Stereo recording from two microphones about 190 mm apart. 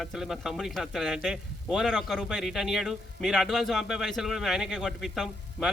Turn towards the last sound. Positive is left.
turn(degrees=0)  # may be behind; listen again after turning